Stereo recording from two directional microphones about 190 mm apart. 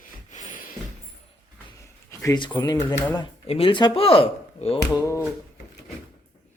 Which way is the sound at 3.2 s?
30° left (ahead or behind).